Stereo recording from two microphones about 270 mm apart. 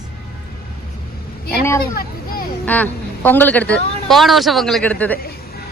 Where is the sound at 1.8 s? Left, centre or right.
Left.